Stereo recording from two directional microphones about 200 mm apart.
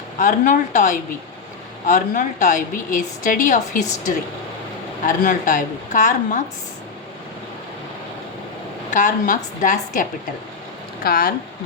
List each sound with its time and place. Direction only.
0.2 s a woman's voice: 40° left (ahead or behind)
5.0 s a woman's voice: 40° left (ahead or behind)
8.9 s a woman's voice: 40° left (ahead or behind)